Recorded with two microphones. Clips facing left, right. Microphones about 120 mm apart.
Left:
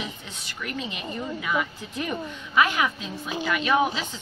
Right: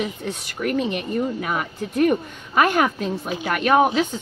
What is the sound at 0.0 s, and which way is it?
Speech, 50° right (ahead or behind).